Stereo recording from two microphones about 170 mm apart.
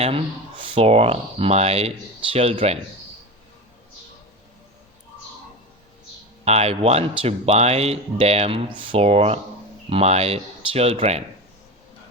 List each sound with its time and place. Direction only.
0.6 s speech: 35° right (ahead or behind)
6.4 s speech: 40° right (ahead or behind)